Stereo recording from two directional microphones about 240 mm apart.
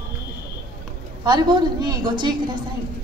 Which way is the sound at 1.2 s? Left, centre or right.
Centre.